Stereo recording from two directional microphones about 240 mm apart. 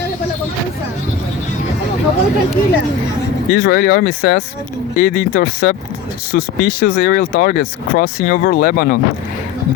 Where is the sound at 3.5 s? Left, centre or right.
Left.